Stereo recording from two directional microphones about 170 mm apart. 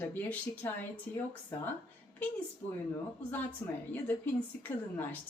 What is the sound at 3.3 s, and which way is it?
A woman's voice, 10° left (ahead or behind).